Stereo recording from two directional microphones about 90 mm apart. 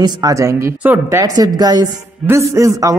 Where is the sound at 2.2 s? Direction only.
35° right (ahead or behind).